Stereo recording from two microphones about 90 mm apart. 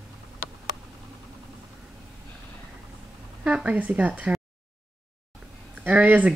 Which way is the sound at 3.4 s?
15° right (ahead or behind).